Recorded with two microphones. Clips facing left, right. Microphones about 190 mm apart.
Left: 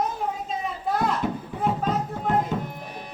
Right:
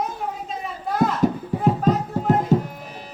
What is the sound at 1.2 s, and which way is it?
Music, 40° right (ahead or behind).